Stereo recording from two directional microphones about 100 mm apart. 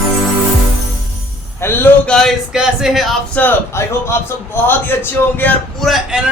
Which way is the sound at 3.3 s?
20° left (ahead or behind).